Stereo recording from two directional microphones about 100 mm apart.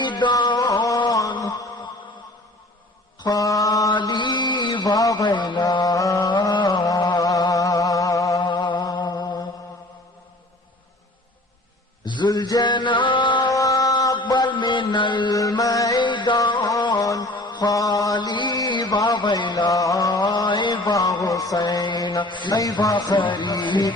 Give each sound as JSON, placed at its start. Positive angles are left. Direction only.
{"t": 0.0, "sound": "a sound", "side_deg": 50}
{"t": 3.2, "sound": "mantra", "side_deg": 40}
{"t": 3.9, "sound": "a sound", "side_deg": 50}
{"t": 5.3, "sound": "mantra", "side_deg": 50}
{"t": 8.4, "sound": "music", "side_deg": 45}
{"t": 12.0, "sound": "mantra", "side_deg": 50}
{"t": 13.5, "sound": "mantra", "side_deg": 35}
{"t": 15.4, "sound": "mantra", "side_deg": 35}
{"t": 16.0, "sound": "music", "side_deg": 50}
{"t": 17.3, "sound": "mantra", "side_deg": 50}